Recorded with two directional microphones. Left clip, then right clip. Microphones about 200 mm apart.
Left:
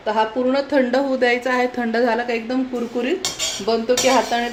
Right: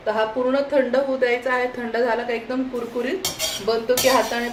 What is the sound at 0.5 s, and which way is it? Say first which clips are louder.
A woman's voice: left 1 dB; 50° left (ahead or behind).